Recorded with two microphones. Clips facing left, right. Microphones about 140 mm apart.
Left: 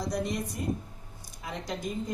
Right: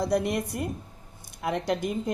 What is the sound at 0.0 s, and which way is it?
Speech, 60° right (ahead or behind).